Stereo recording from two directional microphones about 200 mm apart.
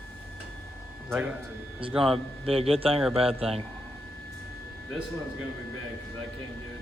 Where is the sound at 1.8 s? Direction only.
25° right (ahead or behind).